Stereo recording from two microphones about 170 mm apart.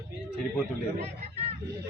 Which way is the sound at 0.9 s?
40° right (ahead or behind).